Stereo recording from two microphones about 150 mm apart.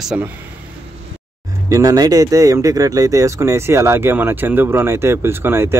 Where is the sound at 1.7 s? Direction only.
25° right (ahead or behind).